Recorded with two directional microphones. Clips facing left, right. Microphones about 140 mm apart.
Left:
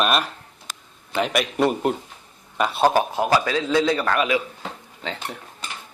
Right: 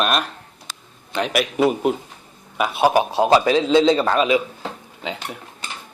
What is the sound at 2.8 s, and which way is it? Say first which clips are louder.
A man's voice: right 3 dB; 15° right (ahead or behind).